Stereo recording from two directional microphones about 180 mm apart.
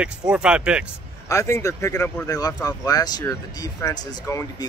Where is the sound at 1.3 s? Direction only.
15° left (ahead or behind).